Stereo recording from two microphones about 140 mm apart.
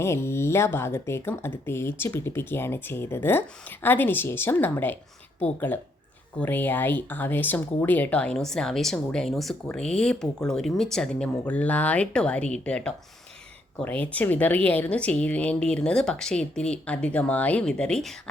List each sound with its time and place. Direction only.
0.0 s speech: 20° left (ahead or behind)